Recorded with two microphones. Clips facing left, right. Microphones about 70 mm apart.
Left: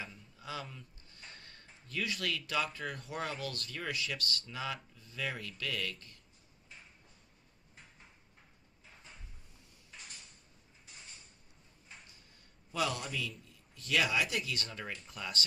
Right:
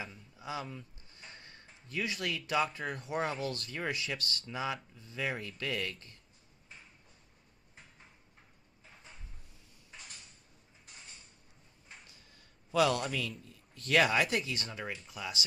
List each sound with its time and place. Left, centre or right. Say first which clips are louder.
0.0 s a sound: right 2 dB; centre
3.1 s speech: right 7 dB; right
12.7 s a man's voice: right 7 dB; right
13.0 s speech: right 4 dB; right
14.6 s speech: right 2 dB; centre